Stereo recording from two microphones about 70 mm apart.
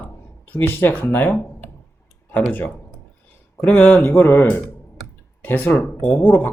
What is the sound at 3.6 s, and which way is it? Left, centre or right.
Speech, left.